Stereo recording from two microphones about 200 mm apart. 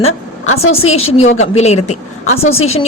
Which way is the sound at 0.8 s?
30° left (ahead or behind).